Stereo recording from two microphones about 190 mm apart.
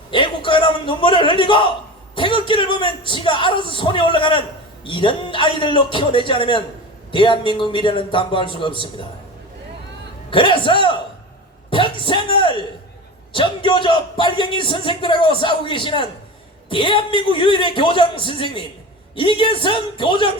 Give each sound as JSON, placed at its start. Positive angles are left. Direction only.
{"t": 0.1, "sound": "speech", "side_deg": 25}
{"t": 10.2, "sound": "speech", "side_deg": 25}